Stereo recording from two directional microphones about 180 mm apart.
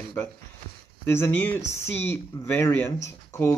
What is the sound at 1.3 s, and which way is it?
Speech, 10° left (ahead or behind).